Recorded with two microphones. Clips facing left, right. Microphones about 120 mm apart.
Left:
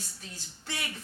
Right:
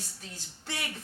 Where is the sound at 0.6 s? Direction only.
50° right (ahead or behind).